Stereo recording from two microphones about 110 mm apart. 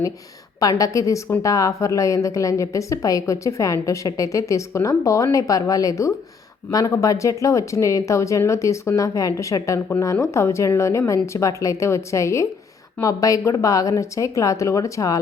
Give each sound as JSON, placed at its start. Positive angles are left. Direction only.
{"t": 0.6, "sound": "a woman's voice", "side_deg": 30}